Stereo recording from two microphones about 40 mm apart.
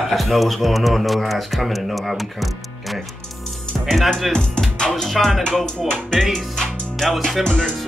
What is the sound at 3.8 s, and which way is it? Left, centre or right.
Music, centre.